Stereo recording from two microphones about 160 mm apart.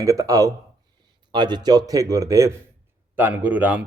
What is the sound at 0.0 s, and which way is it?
A man's voice, 20° right (ahead or behind).